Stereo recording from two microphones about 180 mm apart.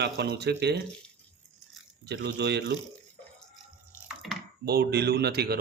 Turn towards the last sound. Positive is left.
turn(degrees=-65)  # may be behind; listen again after turning